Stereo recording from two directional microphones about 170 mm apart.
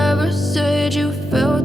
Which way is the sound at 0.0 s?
Centre (ahead or behind).